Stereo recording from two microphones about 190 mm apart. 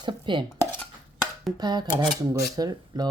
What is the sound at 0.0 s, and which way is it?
Dishes, 25° right (ahead or behind).